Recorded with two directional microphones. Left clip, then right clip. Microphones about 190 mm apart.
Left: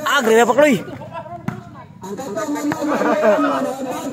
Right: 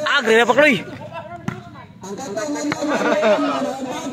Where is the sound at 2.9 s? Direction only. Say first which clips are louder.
Left 1 dB; 5° right (ahead or behind).